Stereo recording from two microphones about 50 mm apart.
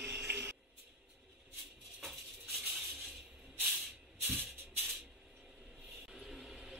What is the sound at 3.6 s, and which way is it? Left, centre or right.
Hiss, centre.